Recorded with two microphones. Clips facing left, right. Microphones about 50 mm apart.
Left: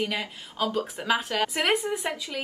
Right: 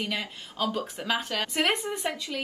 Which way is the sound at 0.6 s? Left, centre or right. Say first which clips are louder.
Left 2 dB; centre.